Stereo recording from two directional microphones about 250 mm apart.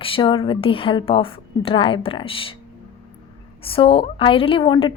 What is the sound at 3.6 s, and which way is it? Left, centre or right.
Speech, left.